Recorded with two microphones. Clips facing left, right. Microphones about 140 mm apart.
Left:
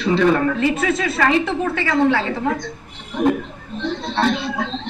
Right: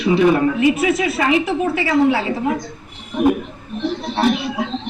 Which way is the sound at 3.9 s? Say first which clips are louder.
Right 1 dB; 25° left (ahead or behind).